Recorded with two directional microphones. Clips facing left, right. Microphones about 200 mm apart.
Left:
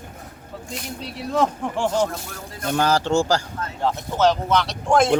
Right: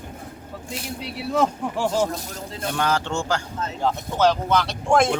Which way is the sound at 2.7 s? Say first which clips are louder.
Left 5 dB; 35° left (ahead or behind).